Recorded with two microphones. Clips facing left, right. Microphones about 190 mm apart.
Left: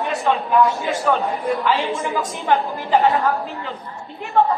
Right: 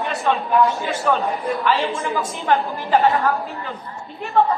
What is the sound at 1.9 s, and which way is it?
A woman's voice, 15° left (ahead or behind).